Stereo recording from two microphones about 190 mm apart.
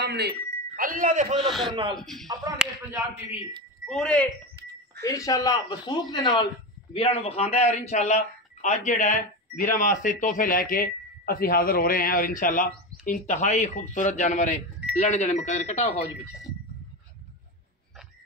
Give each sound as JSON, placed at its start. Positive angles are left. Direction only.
{"t": 0.0, "sound": "a man's voice", "side_deg": -60}
{"t": 1.4, "sound": "speech", "side_deg": 0}
{"t": 1.7, "sound": "speech", "side_deg": -25}
{"t": 2.0, "sound": "speech", "side_deg": 0}
{"t": 3.8, "sound": "speech", "side_deg": 5}
{"t": 5.0, "sound": "speech", "side_deg": 15}
{"t": 6.9, "sound": "a man's voice", "side_deg": 30}